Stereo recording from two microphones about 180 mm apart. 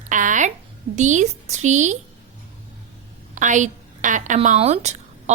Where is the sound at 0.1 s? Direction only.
45° right (ahead or behind).